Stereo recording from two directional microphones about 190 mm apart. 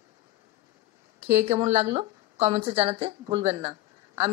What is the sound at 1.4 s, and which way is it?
Speech, 35° right (ahead or behind).